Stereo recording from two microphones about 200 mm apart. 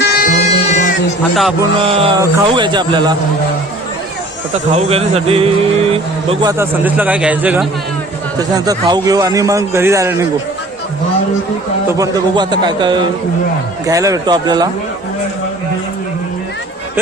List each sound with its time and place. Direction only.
0.0 s a sound: 50° left (ahead or behind)
1.8 s speech: 30° right (ahead or behind)
4.5 s speech: 30° right (ahead or behind)
6.5 s a man's voice: 10° right (ahead or behind)
8.4 s a man's voice: 20° right (ahead or behind)
11.9 s speech: 15° right (ahead or behind)